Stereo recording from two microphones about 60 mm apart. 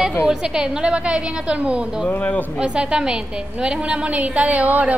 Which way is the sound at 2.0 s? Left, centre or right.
Left.